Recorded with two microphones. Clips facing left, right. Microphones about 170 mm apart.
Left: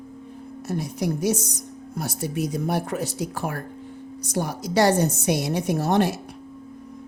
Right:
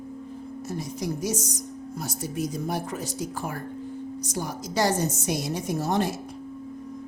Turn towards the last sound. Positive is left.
turn(degrees=65)  # may be behind; listen again after turning